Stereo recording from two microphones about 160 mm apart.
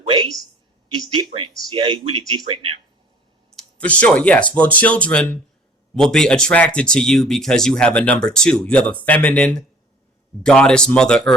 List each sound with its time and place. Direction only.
1.7 s speech: 35° right (ahead or behind)
3.5 s speech: 5° left (ahead or behind)